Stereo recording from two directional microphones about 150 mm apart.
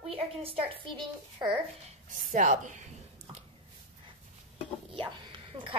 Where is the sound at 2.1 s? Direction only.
60° right (ahead or behind).